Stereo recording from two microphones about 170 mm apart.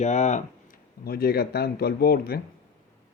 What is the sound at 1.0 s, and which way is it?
Speech, 65° left (ahead or behind).